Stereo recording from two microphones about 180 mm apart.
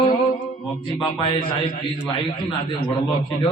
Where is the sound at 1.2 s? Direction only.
25° left (ahead or behind).